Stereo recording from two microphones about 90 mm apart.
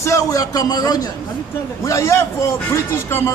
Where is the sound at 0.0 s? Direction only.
35° left (ahead or behind).